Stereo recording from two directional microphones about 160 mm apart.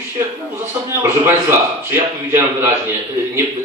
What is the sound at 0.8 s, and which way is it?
A man's voice, 15° right (ahead or behind).